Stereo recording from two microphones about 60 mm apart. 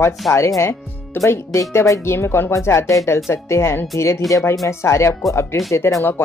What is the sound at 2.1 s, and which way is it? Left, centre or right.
Speech, left.